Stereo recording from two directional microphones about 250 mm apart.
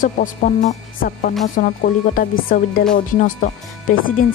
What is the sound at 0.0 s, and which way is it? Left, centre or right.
Speech, left.